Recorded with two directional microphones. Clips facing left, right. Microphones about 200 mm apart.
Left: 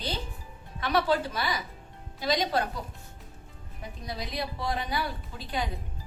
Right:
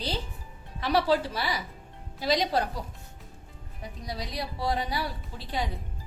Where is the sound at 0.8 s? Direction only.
35° right (ahead or behind).